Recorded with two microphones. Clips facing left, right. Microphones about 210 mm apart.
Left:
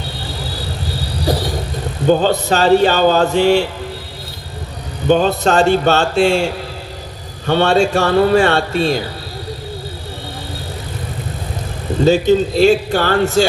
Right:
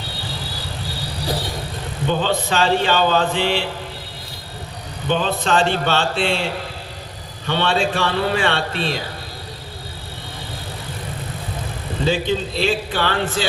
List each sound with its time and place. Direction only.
2.0 s speech: 40° left (ahead or behind)
5.0 s speech: 45° left (ahead or behind)
12.0 s speech: 45° left (ahead or behind)